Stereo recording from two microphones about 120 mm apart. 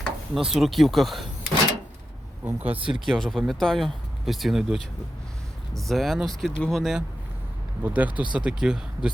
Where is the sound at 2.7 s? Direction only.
45° right (ahead or behind).